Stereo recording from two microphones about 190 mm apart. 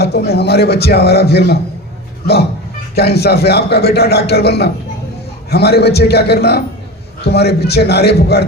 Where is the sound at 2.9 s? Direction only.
55° left (ahead or behind).